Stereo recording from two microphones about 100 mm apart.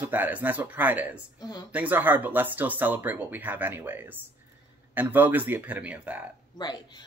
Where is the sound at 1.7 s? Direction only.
15° right (ahead or behind).